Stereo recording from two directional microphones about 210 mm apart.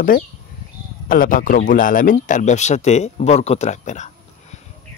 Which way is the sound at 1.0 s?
40° left (ahead or behind).